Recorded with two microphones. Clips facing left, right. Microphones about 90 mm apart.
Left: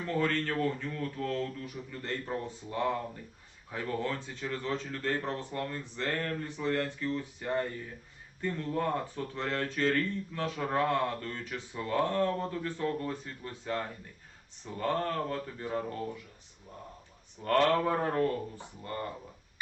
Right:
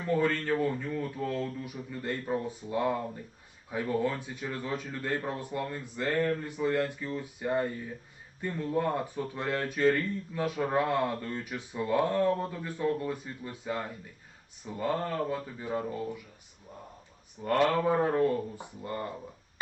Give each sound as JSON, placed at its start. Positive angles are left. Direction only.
{"t": 0.0, "sound": "speech", "side_deg": -15}
{"t": 17.4, "sound": "speech", "side_deg": -10}